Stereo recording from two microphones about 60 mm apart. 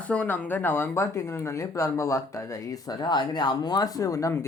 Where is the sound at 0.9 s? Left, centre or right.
Left.